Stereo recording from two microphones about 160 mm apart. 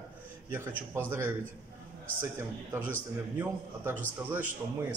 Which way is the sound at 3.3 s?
10° right (ahead or behind).